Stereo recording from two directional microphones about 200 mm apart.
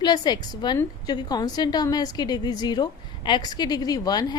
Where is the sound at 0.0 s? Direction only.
20° left (ahead or behind).